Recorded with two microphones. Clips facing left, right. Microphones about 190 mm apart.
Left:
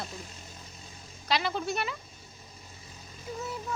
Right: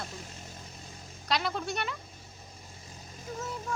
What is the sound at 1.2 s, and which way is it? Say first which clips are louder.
Speech: left 2 dB; centre (ahead or behind).